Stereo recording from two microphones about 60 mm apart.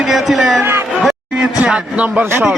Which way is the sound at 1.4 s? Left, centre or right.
Centre.